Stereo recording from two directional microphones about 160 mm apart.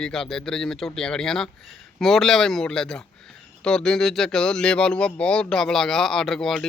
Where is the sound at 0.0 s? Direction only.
5° left (ahead or behind).